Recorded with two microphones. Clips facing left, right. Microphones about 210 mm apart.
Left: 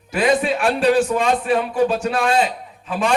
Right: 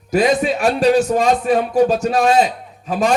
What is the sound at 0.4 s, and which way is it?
A man's voice, 40° right (ahead or behind).